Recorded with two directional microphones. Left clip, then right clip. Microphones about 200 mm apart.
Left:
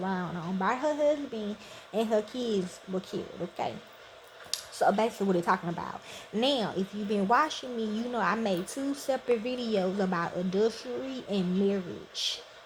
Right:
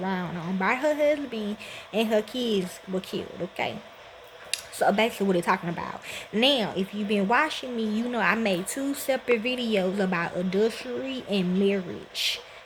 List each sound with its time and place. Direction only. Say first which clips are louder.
0.0 s a woman's voice: right 3 dB; 15° right (ahead or behind)
4.9 s a woman's voice: right 3 dB; 10° right (ahead or behind)
8.6 s speech: right 4 dB; 35° right (ahead or behind)
9.0 s a woman's voice: right 4 dB; 10° right (ahead or behind)